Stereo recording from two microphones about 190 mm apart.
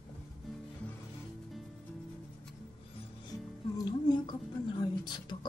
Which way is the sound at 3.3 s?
20° left (ahead or behind).